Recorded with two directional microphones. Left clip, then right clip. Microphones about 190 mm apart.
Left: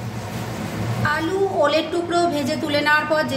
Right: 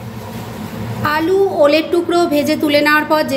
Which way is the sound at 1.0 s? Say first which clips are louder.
Right 6 dB; 45° right (ahead or behind).